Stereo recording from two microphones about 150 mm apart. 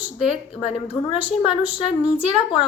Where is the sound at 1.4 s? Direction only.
35° left (ahead or behind).